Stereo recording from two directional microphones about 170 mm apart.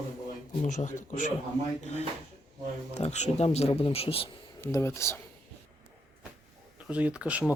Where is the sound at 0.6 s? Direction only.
45° left (ahead or behind).